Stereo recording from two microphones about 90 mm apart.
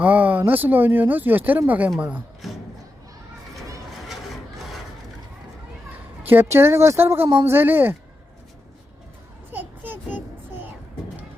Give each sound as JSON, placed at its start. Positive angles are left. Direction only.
{"t": 0.0, "sound": "speech", "side_deg": -20}
{"t": 2.4, "sound": "crowd", "side_deg": 0}
{"t": 4.1, "sound": "rub", "side_deg": -5}
{"t": 6.2, "sound": "speech", "side_deg": -25}
{"t": 9.5, "sound": "child singing", "side_deg": -20}